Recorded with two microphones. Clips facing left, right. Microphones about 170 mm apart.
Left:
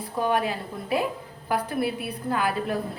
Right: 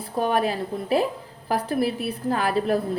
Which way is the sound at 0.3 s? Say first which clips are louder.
Right 4 dB; 35° right (ahead or behind).